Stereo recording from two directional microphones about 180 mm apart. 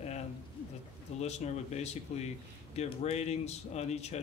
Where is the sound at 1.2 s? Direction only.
35° left (ahead or behind).